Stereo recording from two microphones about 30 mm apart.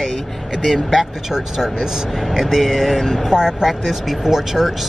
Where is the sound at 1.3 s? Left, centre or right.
Centre.